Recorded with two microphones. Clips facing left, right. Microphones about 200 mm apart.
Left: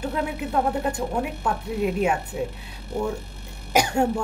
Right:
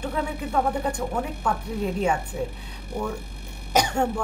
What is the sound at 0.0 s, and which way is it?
A woman's voice, 5° left (ahead or behind).